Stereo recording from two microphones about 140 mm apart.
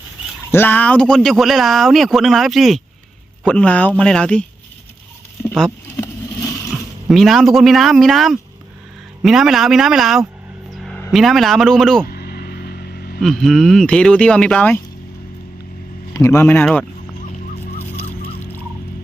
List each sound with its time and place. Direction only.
0.5 s speech: 15° left (ahead or behind)
7.1 s speech: centre (ahead or behind)
10.7 s vehicle: centre (ahead or behind)
11.1 s speech: centre (ahead or behind)
12.0 s a sound: 90° left
13.1 s speech: centre (ahead or behind)
16.1 s speech: 20° left (ahead or behind)